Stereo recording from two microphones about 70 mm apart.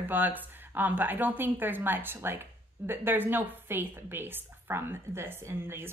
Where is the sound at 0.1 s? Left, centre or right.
Right.